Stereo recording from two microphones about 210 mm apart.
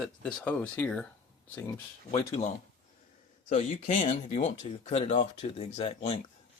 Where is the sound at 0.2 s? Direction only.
5° left (ahead or behind).